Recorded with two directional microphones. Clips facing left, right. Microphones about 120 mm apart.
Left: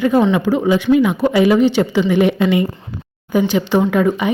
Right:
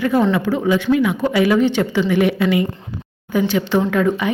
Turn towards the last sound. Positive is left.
turn(degrees=15)  # may be behind; listen again after turning